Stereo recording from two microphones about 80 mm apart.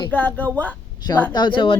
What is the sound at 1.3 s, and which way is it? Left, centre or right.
Speech, left.